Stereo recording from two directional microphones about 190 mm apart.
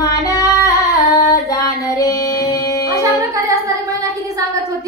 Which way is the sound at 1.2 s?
15° left (ahead or behind).